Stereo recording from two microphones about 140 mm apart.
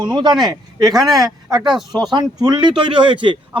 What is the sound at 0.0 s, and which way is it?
Speech, 30° right (ahead or behind).